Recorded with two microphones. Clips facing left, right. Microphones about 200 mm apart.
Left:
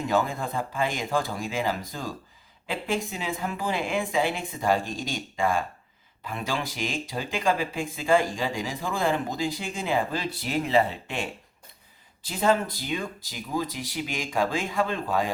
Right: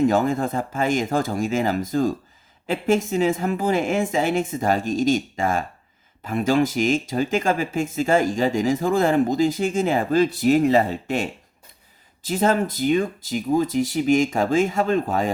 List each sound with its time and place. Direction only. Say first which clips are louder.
0.0 s speech: right 7 dB; 45° right (ahead or behind)